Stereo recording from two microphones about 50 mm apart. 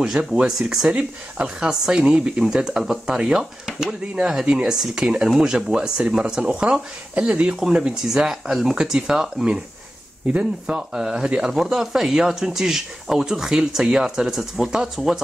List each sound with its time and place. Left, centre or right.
0.0 s speech: centre
4.3 s speech: centre
10.2 s speech: right
10.9 s speech: centre